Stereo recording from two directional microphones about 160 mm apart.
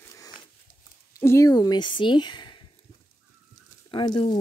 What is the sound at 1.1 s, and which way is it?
Speech, 20° left (ahead or behind).